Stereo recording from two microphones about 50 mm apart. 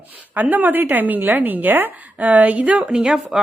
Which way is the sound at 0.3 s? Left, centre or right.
Right.